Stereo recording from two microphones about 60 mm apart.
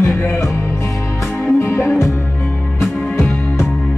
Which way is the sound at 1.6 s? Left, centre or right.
Left.